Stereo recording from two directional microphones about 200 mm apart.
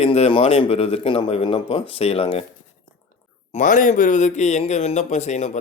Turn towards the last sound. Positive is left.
turn(degrees=35)  # may be behind; listen again after turning